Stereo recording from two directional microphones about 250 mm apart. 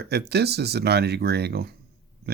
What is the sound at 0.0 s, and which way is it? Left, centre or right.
Speech, right.